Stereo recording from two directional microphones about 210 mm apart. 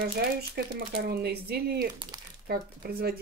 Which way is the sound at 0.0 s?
50° right (ahead or behind).